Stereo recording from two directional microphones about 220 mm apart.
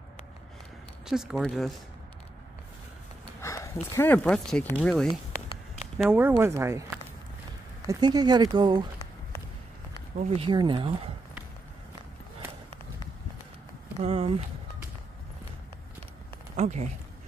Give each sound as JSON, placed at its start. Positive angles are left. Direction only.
{"t": 1.0, "sound": "speech", "side_deg": 0}
{"t": 3.3, "sound": "a sound", "side_deg": 10}
{"t": 3.9, "sound": "speech", "side_deg": 10}
{"t": 10.1, "sound": "speech", "side_deg": -25}
{"t": 14.0, "sound": "speech", "side_deg": -30}
{"t": 16.5, "sound": "speech", "side_deg": -30}